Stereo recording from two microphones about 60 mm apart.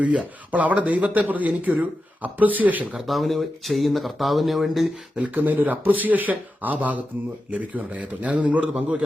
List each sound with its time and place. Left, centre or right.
0.0 s speech: right
3.1 s speech: centre
5.1 s speech: right